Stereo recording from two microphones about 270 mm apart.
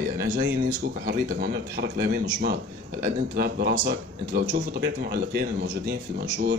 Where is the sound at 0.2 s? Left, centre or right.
Right.